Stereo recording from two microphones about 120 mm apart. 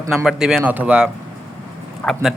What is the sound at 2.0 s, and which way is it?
Speech, 10° left (ahead or behind).